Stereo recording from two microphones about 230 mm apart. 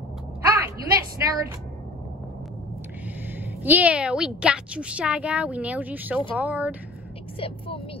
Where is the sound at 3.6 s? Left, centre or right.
Centre.